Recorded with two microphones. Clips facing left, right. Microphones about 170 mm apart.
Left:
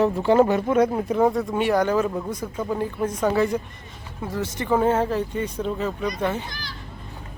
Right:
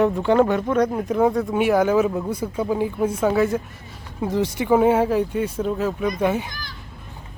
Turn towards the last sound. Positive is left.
turn(degrees=-50)  # may be behind; listen again after turning